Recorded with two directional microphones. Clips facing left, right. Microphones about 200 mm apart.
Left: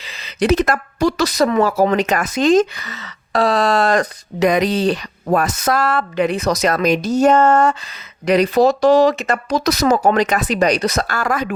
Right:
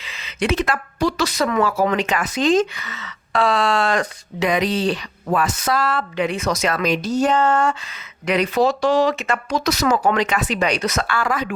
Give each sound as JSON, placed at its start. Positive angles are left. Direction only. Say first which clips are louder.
{"t": 0.0, "sound": "speech", "louder": "left 4 dB", "side_deg": 35}